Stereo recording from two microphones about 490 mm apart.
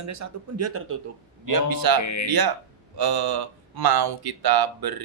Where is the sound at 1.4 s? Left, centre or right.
Right.